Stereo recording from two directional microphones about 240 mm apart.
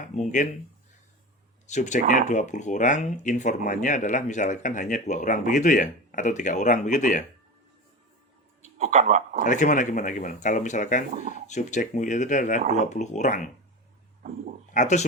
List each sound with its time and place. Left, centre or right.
0.0 s speech: left
1.6 s speech: left
8.8 s a man's voice: right
9.4 s speech: left
14.7 s speech: left